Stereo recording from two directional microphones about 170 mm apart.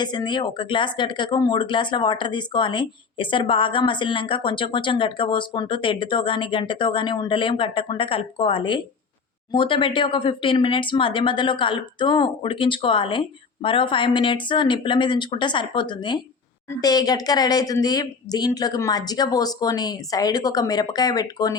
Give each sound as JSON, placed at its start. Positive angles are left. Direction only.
{"t": 0.0, "sound": "speech", "side_deg": 25}